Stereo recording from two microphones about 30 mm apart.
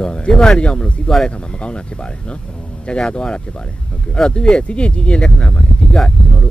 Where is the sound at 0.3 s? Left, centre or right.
Centre.